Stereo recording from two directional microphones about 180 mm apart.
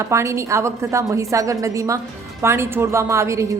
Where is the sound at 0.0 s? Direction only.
15° right (ahead or behind).